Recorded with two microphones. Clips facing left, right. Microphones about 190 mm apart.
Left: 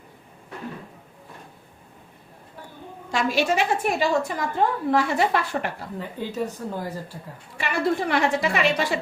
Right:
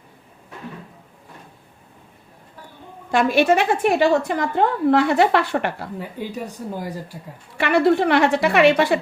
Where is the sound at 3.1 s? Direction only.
55° right (ahead or behind).